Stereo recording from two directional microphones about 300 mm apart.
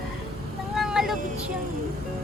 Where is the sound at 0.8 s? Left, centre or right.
Centre.